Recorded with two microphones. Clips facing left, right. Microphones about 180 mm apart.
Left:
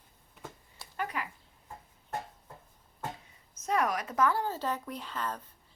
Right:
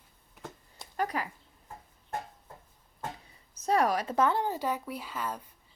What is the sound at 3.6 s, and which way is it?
Speech, 35° right (ahead or behind).